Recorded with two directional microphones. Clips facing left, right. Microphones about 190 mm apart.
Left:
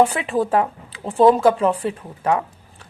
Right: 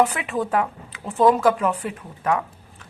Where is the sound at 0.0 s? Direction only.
30° left (ahead or behind).